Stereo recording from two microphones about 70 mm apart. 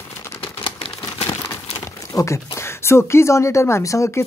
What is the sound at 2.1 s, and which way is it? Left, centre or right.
Speech, left.